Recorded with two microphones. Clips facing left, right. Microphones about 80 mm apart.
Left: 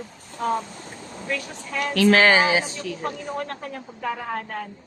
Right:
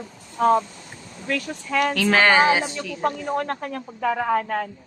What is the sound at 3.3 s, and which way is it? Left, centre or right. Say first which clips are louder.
Speech: right 5 dB; right.